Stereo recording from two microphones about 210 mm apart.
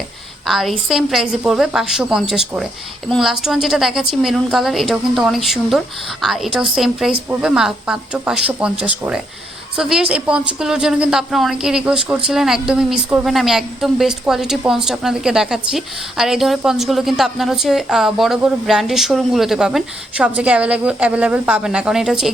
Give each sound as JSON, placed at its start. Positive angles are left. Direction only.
{"t": 0.4, "sound": "speech", "side_deg": 0}